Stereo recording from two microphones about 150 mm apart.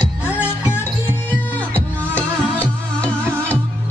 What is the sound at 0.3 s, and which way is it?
Music, 15° left (ahead or behind).